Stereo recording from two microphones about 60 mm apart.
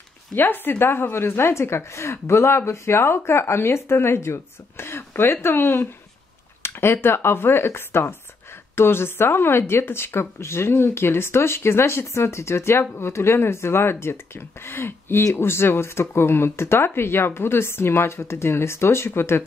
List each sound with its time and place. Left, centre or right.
0.3 s a woman's voice: left